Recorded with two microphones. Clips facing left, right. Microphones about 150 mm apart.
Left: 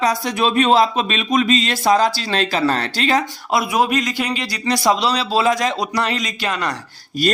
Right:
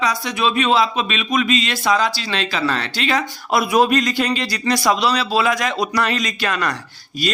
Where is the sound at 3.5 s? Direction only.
20° left (ahead or behind).